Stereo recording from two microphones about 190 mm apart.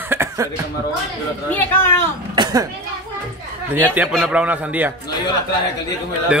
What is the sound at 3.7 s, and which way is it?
A man's voice, 10° right (ahead or behind).